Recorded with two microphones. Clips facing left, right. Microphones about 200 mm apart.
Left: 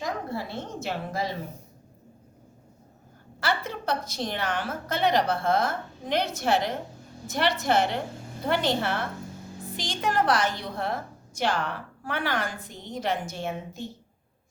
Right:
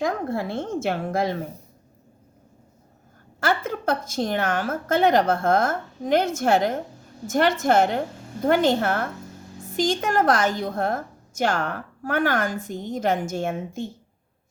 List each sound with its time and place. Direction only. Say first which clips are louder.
0.0 s a woman's voice: right 6 dB; 50° right (ahead or behind)
3.4 s a woman's voice: right 5 dB; 45° right (ahead or behind)